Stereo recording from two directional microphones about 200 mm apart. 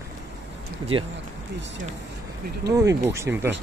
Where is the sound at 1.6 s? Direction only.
65° right (ahead or behind).